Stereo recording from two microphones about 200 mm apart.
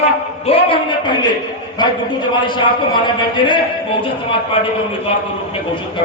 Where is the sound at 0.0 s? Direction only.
25° left (ahead or behind).